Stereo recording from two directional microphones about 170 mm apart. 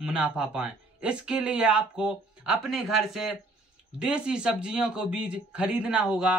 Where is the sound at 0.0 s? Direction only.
5° right (ahead or behind).